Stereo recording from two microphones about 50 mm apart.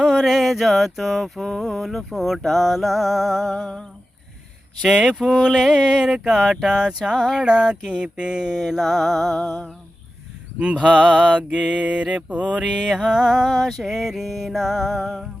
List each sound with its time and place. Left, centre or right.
0.0 s mantra: centre
3.5 s a sound: centre
4.8 s mantra: centre
10.6 s mantra: right; by 15.1 s centre